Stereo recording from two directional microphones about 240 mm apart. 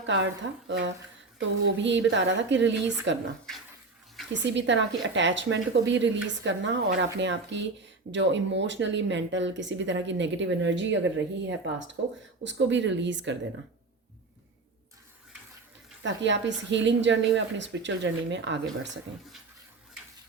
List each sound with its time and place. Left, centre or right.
0.0 s speech: right
1.4 s speech: right
4.4 s speech: right
16.0 s speech: right